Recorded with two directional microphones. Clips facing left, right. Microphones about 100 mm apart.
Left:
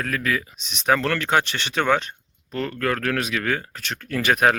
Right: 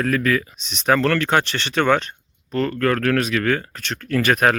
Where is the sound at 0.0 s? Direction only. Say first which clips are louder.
Right 5 dB; 5° left (ahead or behind).